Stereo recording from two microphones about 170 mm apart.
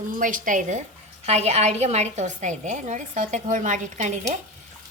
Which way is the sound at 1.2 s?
40° right (ahead or behind).